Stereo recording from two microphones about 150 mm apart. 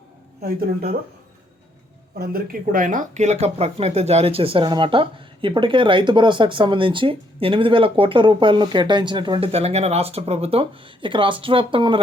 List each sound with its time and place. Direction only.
0.4 s speech: 90° right
2.1 s speech: 85° right; by 12.0 s 35° right (ahead or behind)